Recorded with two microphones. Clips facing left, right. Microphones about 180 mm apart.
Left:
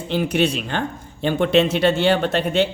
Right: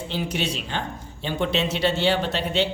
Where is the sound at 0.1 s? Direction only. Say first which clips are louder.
Left 9 dB; 55° left (ahead or behind).